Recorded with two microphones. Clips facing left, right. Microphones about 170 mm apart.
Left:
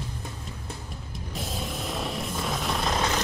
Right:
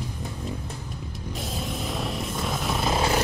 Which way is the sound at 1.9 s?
Centre (ahead or behind).